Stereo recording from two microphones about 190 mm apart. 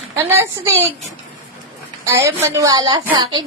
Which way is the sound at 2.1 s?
15° right (ahead or behind).